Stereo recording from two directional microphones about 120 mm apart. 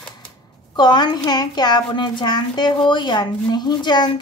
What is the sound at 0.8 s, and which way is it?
A woman's voice, 35° left (ahead or behind).